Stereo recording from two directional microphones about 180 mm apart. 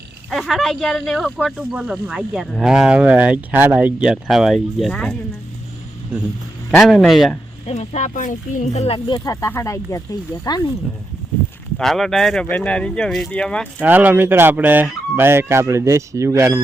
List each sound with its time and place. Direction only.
0.3 s speech: centre (ahead or behind)
4.9 s speech: 10° left (ahead or behind)
6.7 s speech: centre (ahead or behind)
7.7 s speech: 40° left (ahead or behind); by 10.0 s 15° left (ahead or behind)
11.8 s speech: centre (ahead or behind)
13.8 s fowl: 10° right (ahead or behind)